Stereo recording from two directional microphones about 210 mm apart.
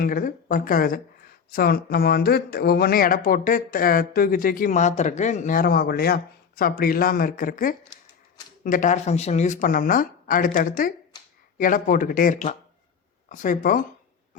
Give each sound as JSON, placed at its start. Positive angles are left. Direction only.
{"t": 0.0, "sound": "speech", "side_deg": 40}